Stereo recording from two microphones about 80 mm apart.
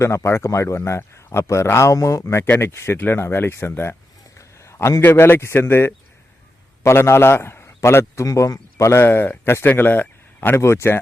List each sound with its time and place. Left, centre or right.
0.0 s a man's voice: left
10.6 s speech: left